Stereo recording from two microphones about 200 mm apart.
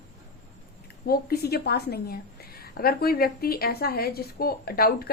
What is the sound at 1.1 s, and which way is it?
A woman's voice, 50° left (ahead or behind).